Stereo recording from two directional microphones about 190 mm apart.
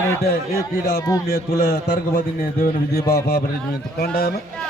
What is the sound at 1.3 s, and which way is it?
A man's voice, 50° left (ahead or behind).